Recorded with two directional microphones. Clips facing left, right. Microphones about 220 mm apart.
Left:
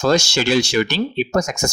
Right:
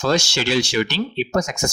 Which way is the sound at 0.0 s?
45° left (ahead or behind).